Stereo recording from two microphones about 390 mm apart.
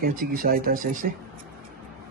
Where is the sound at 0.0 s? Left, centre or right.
Right.